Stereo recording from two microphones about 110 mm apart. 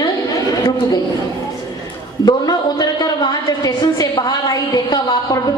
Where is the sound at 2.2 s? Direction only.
35° left (ahead or behind).